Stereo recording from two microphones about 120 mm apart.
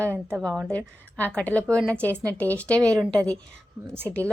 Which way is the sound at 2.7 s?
25° right (ahead or behind).